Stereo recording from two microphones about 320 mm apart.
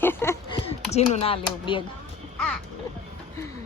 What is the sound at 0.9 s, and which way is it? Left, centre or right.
Speech, centre.